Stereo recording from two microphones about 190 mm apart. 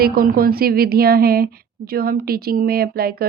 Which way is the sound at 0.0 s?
50° right (ahead or behind).